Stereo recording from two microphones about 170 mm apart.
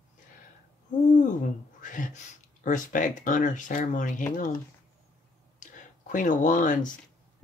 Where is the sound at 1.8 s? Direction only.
50° left (ahead or behind).